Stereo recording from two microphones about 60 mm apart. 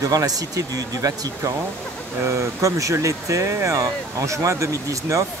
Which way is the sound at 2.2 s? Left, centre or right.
Right.